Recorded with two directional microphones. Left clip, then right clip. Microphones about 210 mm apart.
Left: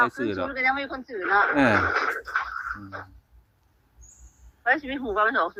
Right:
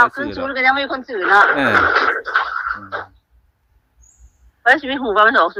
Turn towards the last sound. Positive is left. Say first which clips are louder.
# right 10 dB
turn(degrees=-45)  # may be behind; listen again after turning